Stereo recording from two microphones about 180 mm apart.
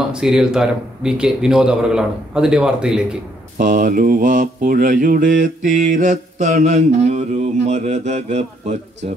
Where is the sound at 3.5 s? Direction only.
45° right (ahead or behind).